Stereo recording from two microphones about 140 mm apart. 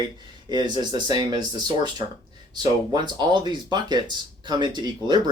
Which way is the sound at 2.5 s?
30° right (ahead or behind).